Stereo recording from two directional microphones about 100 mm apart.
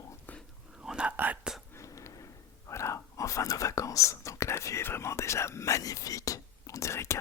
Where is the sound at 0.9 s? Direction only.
10° right (ahead or behind).